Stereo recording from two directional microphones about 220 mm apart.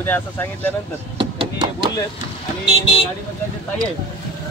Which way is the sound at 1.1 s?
20° right (ahead or behind).